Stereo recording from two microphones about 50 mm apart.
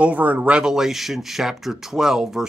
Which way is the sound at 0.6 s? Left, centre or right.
Centre.